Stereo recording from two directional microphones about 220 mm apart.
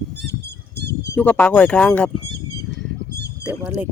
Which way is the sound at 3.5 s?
5° right (ahead or behind).